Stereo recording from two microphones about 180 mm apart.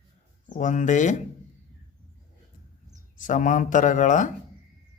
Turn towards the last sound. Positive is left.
turn(degrees=45)  # may be behind; listen again after turning